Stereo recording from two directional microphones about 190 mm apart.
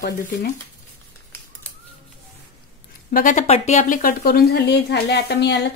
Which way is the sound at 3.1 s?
45° left (ahead or behind).